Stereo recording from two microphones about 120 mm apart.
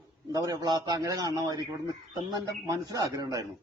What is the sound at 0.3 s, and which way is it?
A man's voice, 30° right (ahead or behind).